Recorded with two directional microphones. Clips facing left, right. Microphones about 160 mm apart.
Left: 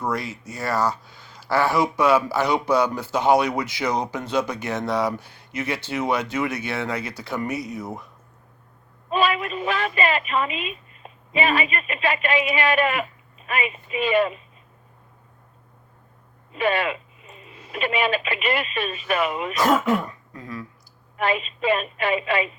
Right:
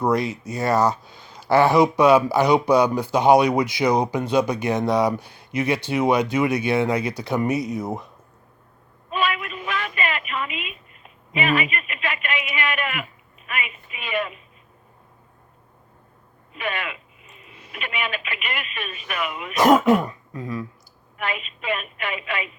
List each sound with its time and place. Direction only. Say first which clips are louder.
0.0 s speech: right 6 dB; 20° right (ahead or behind)
9.0 s a sound: left 3 dB; 30° left (ahead or behind)
13.5 s speech: left 6 dB; 30° left (ahead or behind)
16.6 s a sound: left 7 dB; 35° left (ahead or behind)
17.7 s speech: left 7 dB; 30° left (ahead or behind)
19.5 s speech: right 5 dB; 20° right (ahead or behind)
21.2 s speech: left 6 dB; 30° left (ahead or behind)